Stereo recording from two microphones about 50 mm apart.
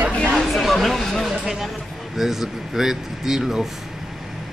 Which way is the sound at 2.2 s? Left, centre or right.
Centre.